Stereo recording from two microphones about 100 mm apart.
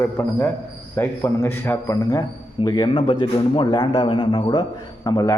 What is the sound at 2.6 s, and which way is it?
Speech, 45° left (ahead or behind).